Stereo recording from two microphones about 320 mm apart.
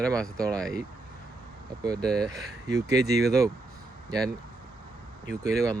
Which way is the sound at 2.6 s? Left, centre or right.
Centre.